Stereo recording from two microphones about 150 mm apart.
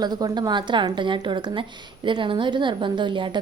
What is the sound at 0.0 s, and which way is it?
A woman's voice, 25° right (ahead or behind).